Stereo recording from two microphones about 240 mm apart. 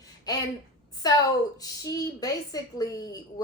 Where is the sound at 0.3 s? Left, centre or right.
Centre.